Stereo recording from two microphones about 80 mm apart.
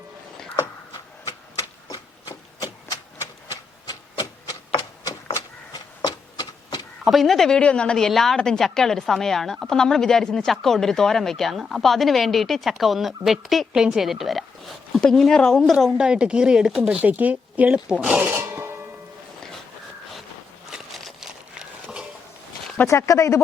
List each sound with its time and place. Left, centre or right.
2.6 s a sound: left
7.0 s speech: centre
15.7 s speech: centre
17.0 s speech: right
18.2 s music: right
20.7 s a sound: centre
22.9 s speech: left